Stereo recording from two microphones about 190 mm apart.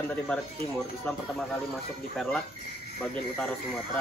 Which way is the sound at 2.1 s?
5° left (ahead or behind).